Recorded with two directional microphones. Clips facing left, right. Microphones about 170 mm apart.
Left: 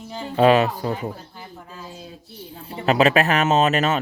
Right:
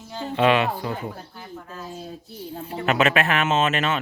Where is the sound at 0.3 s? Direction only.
40° left (ahead or behind).